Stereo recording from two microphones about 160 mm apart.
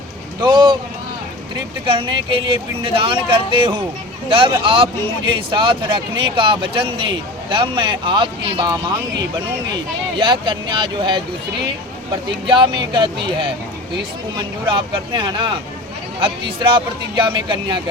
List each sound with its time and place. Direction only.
0.4 s speech: 30° right (ahead or behind)
10.2 s speech: 30° right (ahead or behind)
12.5 s speech: 30° right (ahead or behind)